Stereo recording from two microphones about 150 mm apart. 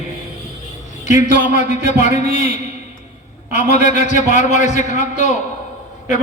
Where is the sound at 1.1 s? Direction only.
55° left (ahead or behind).